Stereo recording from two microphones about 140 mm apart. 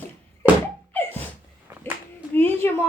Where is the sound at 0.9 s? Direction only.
15° left (ahead or behind).